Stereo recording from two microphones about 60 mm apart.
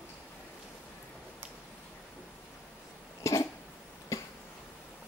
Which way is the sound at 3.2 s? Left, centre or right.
Left.